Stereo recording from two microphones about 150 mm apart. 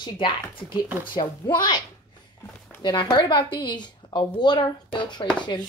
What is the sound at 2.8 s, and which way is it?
A woman's voice, 30° left (ahead or behind).